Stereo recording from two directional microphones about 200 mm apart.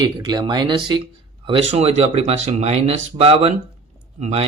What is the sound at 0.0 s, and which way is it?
Speech, 20° right (ahead or behind).